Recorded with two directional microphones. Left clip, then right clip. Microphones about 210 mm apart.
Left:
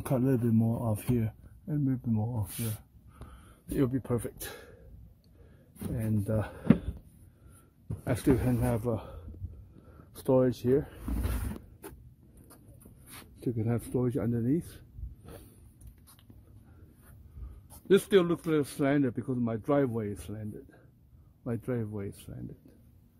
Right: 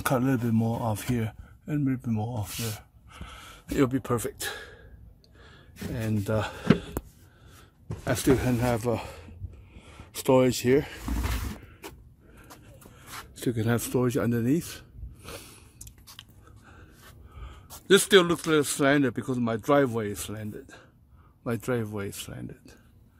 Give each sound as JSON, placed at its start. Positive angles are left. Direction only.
{"t": 0.0, "sound": "speech", "side_deg": -5}
{"t": 3.1, "sound": "gasp", "side_deg": -5}
{"t": 5.5, "sound": "speech", "side_deg": 0}
{"t": 8.0, "sound": "speech", "side_deg": 0}
{"t": 10.2, "sound": "speech", "side_deg": -10}
{"t": 13.4, "sound": "speech", "side_deg": -10}
{"t": 17.6, "sound": "speech", "side_deg": -5}